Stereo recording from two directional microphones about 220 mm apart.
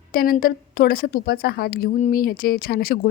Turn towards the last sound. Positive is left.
turn(degrees=40)  # may be behind; listen again after turning